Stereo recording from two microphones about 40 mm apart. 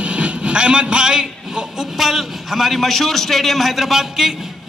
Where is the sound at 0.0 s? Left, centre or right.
Right.